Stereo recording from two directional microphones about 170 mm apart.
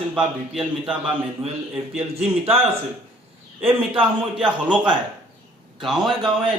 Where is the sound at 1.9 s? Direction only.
35° right (ahead or behind).